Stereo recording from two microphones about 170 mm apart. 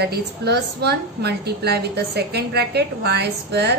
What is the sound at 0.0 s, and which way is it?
A woman's voice, 75° right (ahead or behind).